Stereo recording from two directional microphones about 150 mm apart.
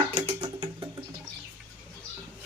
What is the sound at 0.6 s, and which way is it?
Music, 25° right (ahead or behind).